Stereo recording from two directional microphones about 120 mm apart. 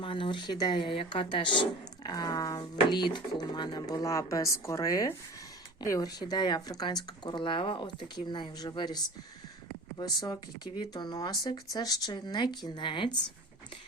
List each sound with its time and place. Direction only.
0.0 s a woman's voice: 45° left (ahead or behind)